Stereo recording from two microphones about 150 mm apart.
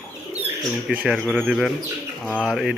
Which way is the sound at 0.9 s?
10° right (ahead or behind).